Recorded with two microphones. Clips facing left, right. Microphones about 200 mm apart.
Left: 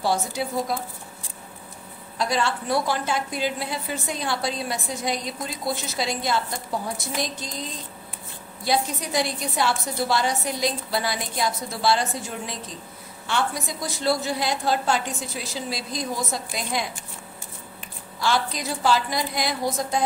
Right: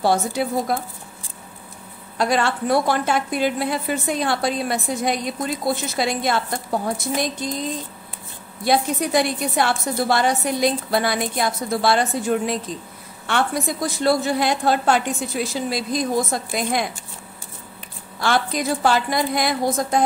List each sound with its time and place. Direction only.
0.0 s a woman's voice: 55° right (ahead or behind)
2.1 s a woman's voice: 60° right (ahead or behind)
8.6 s a woman's voice: 55° right (ahead or behind)
18.2 s a woman's voice: 55° right (ahead or behind)